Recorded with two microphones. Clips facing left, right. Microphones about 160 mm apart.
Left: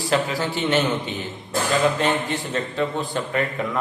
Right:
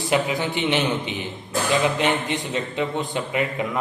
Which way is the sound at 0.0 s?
20° right (ahead or behind).